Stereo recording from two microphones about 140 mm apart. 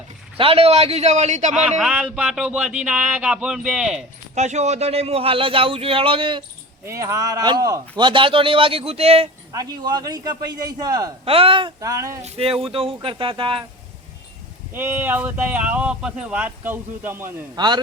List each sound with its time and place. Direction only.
0.3 s speech: 45° right (ahead or behind)
1.8 s speech: 5° right (ahead or behind)
4.4 s speech: 55° right (ahead or behind); by 6.4 s 35° right (ahead or behind)
6.8 s a man's voice: 20° right (ahead or behind); by 9.3 s 45° right (ahead or behind)
9.5 s a man's voice: 25° right (ahead or behind)
11.3 s a man's voice: 40° right (ahead or behind)
11.8 s a man's voice: 25° right (ahead or behind)
12.2 s a man's voice: 45° right (ahead or behind)
14.7 s speech: 15° right (ahead or behind)